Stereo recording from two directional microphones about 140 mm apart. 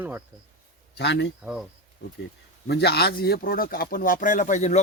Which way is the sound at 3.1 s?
90° left.